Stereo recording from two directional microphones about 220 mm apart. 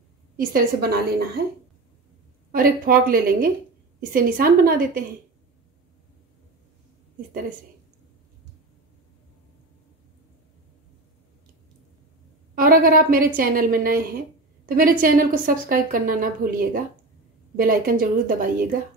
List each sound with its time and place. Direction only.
0.4 s a woman's voice: 40° right (ahead or behind)
2.5 s a woman's voice: 40° right (ahead or behind)
12.5 s a woman's voice: 40° right (ahead or behind)